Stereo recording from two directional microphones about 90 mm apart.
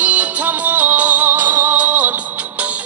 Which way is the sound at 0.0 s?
15° right (ahead or behind).